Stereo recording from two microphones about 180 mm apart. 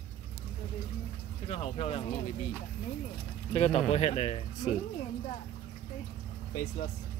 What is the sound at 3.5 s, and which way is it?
Speech, 35° left (ahead or behind).